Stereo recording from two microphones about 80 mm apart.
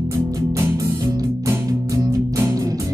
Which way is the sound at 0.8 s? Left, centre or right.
Right.